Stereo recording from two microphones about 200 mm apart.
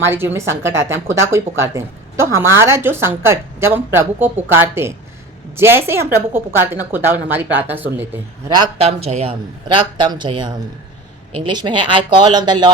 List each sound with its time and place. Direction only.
0.0 s speech: 10° right (ahead or behind)
8.5 s a man's voice: 25° right (ahead or behind)